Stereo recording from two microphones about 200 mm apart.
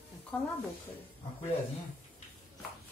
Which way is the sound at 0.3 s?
5° left (ahead or behind).